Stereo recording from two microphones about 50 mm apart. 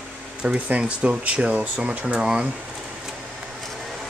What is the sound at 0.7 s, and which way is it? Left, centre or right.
Speech, right.